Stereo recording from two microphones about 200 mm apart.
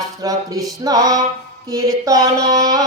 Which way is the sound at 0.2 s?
20° right (ahead or behind).